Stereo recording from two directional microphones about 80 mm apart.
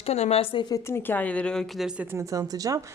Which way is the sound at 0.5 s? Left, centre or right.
Left.